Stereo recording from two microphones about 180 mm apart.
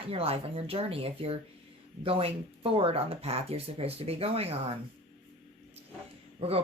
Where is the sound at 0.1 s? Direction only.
35° right (ahead or behind).